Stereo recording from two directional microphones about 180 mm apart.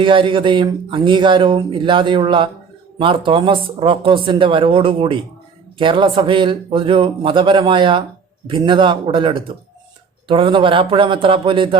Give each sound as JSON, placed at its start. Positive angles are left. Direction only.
{"t": 0.0, "sound": "speech", "side_deg": -30}